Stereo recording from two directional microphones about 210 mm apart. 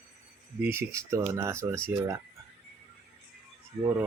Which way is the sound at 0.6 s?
10° right (ahead or behind).